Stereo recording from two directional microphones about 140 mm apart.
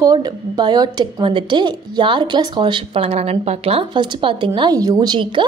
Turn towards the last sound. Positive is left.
turn(degrees=-35)  # may be behind; listen again after turning